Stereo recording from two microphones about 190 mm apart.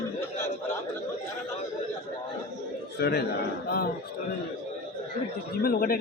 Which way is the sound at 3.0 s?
55° left (ahead or behind).